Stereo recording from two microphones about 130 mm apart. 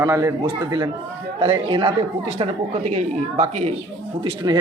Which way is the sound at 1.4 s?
40° right (ahead or behind).